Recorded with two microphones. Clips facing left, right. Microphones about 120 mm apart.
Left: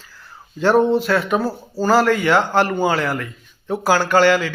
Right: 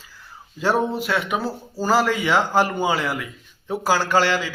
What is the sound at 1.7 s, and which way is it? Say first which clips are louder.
A man's voice: left 4 dB; 5° right (ahead or behind).